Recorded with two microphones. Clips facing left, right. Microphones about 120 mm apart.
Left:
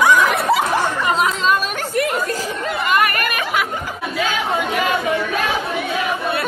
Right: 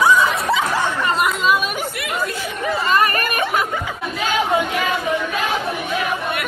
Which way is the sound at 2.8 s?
35° right (ahead or behind).